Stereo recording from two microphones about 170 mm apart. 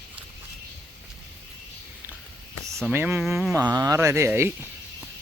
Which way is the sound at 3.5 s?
25° right (ahead or behind).